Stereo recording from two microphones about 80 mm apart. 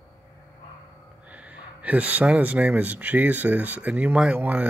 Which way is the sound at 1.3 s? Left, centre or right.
Centre.